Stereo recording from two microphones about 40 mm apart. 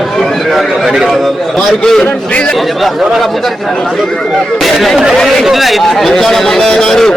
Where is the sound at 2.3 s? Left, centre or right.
Left.